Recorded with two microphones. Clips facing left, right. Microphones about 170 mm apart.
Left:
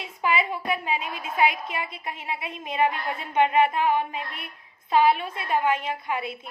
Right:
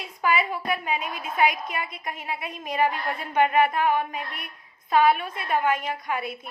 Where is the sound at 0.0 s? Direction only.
25° left (ahead or behind).